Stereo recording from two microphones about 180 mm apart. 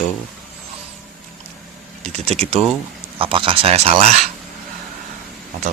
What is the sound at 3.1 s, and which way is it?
Speech, 30° right (ahead or behind).